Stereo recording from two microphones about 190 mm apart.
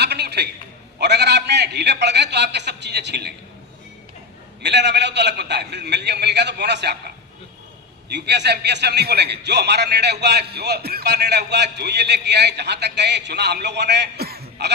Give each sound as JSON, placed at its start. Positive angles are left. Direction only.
{"t": 0.0, "sound": "a sound", "side_deg": -60}
{"t": 0.9, "sound": "a man's voice", "side_deg": -60}
{"t": 4.6, "sound": "a man's voice", "side_deg": -65}
{"t": 8.1, "sound": "a man's voice", "side_deg": -60}